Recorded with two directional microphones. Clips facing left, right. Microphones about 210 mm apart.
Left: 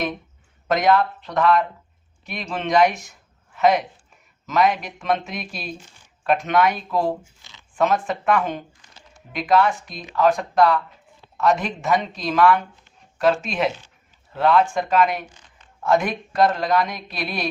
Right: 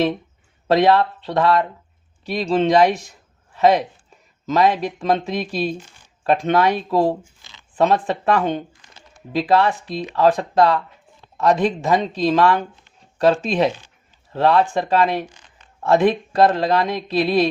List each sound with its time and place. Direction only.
0.7 s speech: 30° right (ahead or behind)